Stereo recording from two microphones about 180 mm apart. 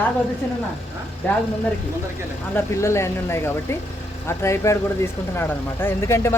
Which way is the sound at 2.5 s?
15° left (ahead or behind).